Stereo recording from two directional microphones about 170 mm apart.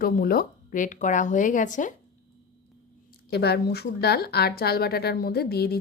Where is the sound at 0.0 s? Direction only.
60° left (ahead or behind).